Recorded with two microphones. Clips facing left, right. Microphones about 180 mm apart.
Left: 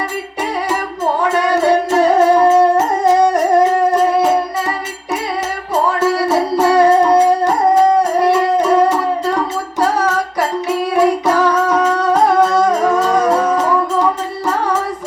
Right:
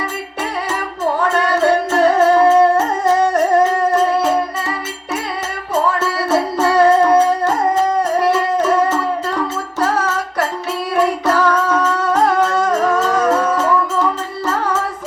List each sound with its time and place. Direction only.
1.3 s music: 15° left (ahead or behind)
6.0 s music: 15° left (ahead or behind)
8.5 s howl: 15° left (ahead or behind)
10.9 s music: 15° left (ahead or behind)